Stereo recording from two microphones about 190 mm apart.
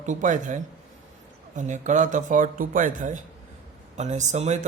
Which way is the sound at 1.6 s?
40° right (ahead or behind).